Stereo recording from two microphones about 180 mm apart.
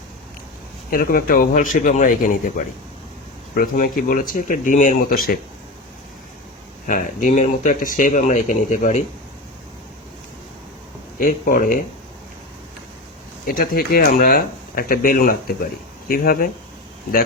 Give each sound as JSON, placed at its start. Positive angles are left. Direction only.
{"t": 0.9, "sound": "speech", "side_deg": 55}
{"t": 3.5, "sound": "speech", "side_deg": 50}
{"t": 6.8, "sound": "speech", "side_deg": 50}
{"t": 11.2, "sound": "speech", "side_deg": 50}
{"t": 13.4, "sound": "speech", "side_deg": 55}